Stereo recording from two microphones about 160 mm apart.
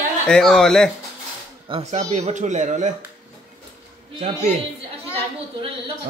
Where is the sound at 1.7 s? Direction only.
40° right (ahead or behind).